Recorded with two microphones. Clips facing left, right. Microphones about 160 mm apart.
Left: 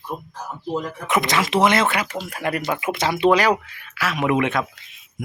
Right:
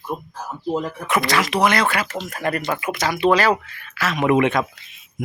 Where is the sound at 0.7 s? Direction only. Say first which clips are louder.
Right 2 dB; 20° right (ahead or behind).